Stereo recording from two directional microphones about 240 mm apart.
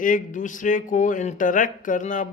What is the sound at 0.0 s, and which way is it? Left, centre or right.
Speech, left.